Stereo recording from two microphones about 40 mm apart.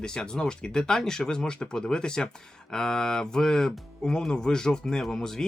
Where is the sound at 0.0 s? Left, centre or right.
Centre.